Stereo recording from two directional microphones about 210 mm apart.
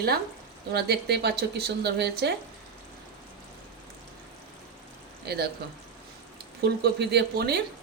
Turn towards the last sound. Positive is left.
turn(degrees=-50)  # may be behind; listen again after turning